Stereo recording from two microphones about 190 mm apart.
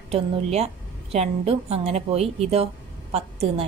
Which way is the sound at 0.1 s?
35° right (ahead or behind).